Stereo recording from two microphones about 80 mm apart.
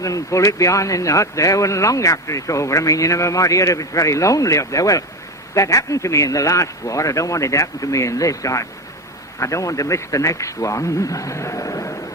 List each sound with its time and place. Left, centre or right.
0.0 s speech: left